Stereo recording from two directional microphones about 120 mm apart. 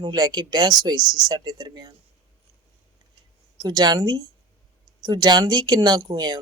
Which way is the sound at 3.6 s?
35° right (ahead or behind).